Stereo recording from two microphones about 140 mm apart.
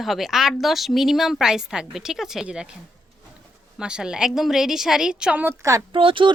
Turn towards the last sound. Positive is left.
turn(degrees=-40)  # may be behind; listen again after turning